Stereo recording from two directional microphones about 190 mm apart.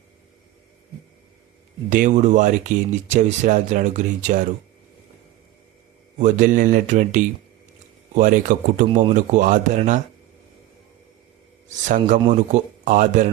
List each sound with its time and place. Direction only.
1.9 s speech: 40° right (ahead or behind)
6.1 s speech: 40° right (ahead or behind)
11.7 s speech: 40° right (ahead or behind)